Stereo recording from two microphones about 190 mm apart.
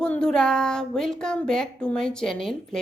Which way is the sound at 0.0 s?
5° left (ahead or behind).